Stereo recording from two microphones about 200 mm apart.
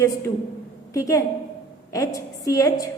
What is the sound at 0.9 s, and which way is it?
A woman's voice, 15° left (ahead or behind).